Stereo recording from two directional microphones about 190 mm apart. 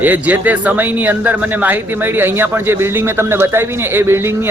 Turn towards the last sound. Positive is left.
turn(degrees=-15)  # may be behind; listen again after turning